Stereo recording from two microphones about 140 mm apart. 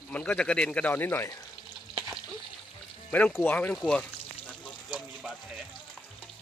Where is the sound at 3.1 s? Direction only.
10° left (ahead or behind).